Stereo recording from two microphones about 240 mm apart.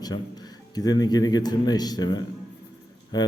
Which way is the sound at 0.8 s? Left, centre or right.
Centre.